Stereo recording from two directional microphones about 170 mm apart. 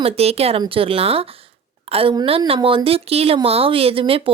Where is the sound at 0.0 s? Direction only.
35° right (ahead or behind).